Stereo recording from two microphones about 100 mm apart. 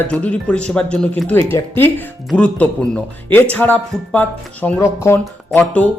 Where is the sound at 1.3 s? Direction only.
25° left (ahead or behind).